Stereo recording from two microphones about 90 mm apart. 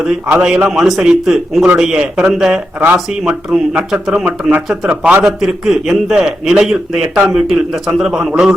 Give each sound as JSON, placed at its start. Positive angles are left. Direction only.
{"t": 0.4, "sound": "a man's voice", "side_deg": -5}
{"t": 2.8, "sound": "a man's voice", "side_deg": -20}